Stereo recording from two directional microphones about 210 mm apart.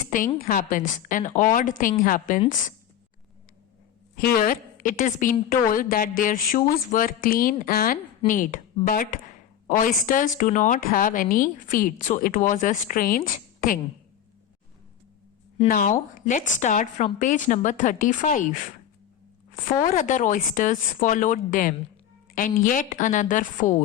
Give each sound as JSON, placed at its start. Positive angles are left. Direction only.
{"t": 0.0, "sound": "a sound", "side_deg": 40}
{"t": 0.4, "sound": "a woman's voice", "side_deg": 40}
{"t": 4.1, "sound": "a woman's voice", "side_deg": 45}
{"t": 15.7, "sound": "a woman's voice", "side_deg": 40}
{"t": 19.9, "sound": "a woman's voice", "side_deg": 35}